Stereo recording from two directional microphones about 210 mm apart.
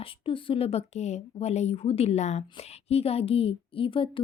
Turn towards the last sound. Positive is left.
turn(degrees=25)  # may be behind; listen again after turning